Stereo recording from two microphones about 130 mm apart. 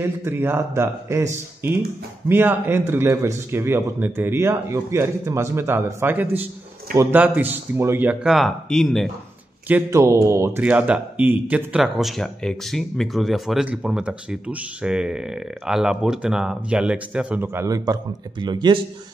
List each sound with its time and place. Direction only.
0.0 s a man's voice: 20° right (ahead or behind); by 9.1 s 5° left (ahead or behind)
9.8 s a man's voice: 25° right (ahead or behind)
10.6 s speech: 10° right (ahead or behind); by 18.8 s 35° right (ahead or behind)